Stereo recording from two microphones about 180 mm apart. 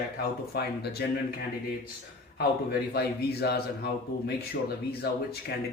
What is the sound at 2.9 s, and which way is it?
A man's voice, 60° left (ahead or behind).